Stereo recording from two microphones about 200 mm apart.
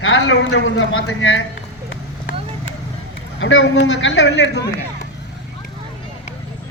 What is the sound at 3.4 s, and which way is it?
A man's voice, 70° left (ahead or behind).